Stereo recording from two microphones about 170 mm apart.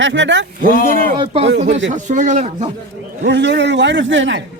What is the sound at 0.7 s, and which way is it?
Speech, 55° left (ahead or behind).